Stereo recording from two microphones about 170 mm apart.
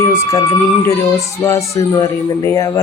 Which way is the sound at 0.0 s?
15° left (ahead or behind).